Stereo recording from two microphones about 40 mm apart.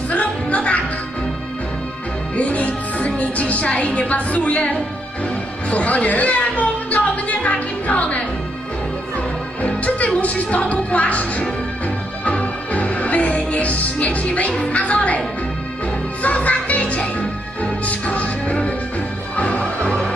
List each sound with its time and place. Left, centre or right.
0.1 s music: left
2.3 s music: left
3.2 s a woman's voice: left
5.7 s a sound: left
9.6 s music: left
16.2 s music: left